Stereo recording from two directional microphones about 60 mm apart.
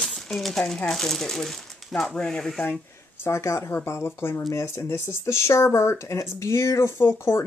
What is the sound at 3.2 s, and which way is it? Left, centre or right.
Speech, left.